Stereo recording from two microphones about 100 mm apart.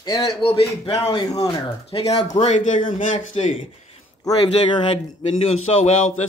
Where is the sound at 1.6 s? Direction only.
75° left (ahead or behind).